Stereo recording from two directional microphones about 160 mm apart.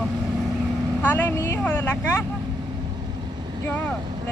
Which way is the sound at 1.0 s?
15° left (ahead or behind).